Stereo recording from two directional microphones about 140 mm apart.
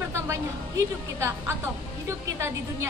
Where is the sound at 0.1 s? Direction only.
20° right (ahead or behind).